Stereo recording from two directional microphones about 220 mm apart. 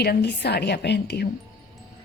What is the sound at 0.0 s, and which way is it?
A woman's voice, 50° left (ahead or behind).